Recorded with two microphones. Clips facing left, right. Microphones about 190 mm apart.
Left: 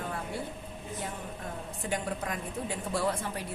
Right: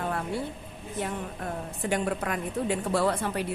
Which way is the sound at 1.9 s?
70° right (ahead or behind).